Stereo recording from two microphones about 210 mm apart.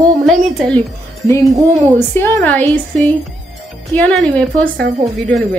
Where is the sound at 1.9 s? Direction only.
10° left (ahead or behind).